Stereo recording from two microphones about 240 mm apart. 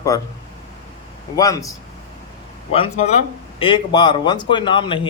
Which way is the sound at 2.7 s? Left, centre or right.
Left.